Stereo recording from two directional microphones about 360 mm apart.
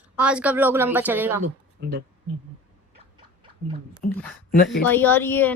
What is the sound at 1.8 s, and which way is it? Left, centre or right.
Speech, right.